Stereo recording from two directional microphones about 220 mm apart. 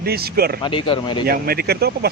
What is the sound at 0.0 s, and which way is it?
Speech, 45° right (ahead or behind).